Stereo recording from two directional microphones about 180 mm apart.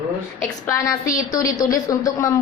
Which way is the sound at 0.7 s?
20° left (ahead or behind).